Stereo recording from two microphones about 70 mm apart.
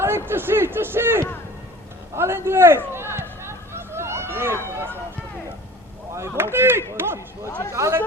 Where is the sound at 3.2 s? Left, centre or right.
Right.